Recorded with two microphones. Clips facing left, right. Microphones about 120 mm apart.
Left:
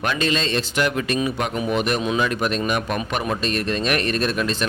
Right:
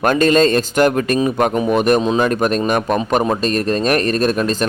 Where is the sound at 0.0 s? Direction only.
45° right (ahead or behind).